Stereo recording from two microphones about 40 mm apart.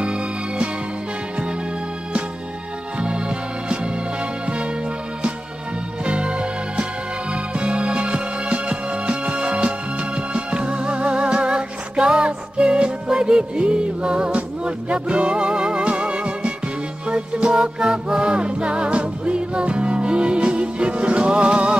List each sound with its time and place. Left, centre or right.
0.0 s music: right
3.0 s music: right
6.0 s music: right